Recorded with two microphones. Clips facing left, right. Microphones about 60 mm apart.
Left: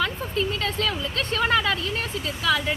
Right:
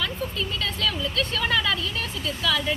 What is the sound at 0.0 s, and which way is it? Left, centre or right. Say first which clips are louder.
Speech: left 3 dB; left.